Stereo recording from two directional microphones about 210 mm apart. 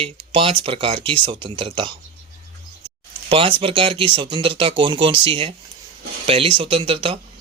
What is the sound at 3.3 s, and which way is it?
Speech, 25° right (ahead or behind).